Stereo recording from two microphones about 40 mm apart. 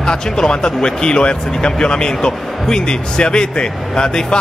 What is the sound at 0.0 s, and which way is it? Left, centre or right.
Speech, centre.